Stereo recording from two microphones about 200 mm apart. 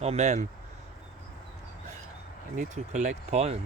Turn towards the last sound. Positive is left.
turn(degrees=-30)  # may be behind; listen again after turning